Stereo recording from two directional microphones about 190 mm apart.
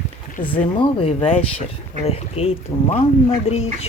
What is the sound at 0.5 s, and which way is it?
Speech, 25° left (ahead or behind).